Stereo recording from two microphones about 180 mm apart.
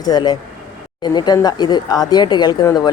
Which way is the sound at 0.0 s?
20° left (ahead or behind).